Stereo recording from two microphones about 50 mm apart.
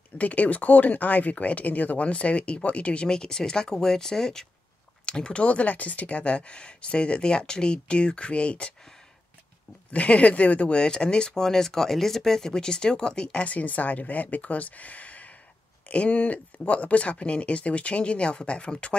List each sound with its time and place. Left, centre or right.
0.2 s speech: left
9.9 s speech: left
10.8 s speech: centre
13.5 s speech: left